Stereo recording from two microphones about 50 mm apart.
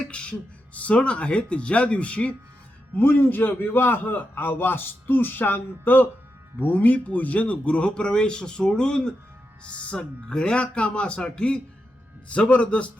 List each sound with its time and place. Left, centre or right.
0.1 s speech: left
2.9 s a man's voice: left